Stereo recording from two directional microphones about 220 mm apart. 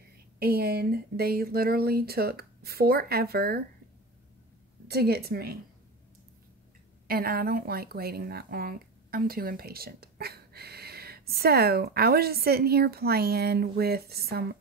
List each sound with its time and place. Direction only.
0.4 s speech: 45° right (ahead or behind)
4.8 s speech: 45° right (ahead or behind)
7.1 s speech: 45° right (ahead or behind)